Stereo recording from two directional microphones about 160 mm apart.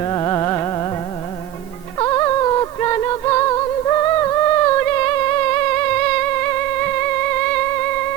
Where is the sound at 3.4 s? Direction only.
20° left (ahead or behind).